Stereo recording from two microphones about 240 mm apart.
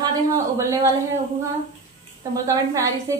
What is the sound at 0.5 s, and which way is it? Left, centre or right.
Speech, centre.